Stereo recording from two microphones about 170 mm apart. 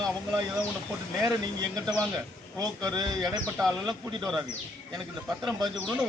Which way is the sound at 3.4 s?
5° left (ahead or behind).